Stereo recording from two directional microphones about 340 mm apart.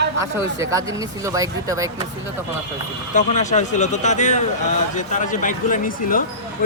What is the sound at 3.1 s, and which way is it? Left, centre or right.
Speech, left.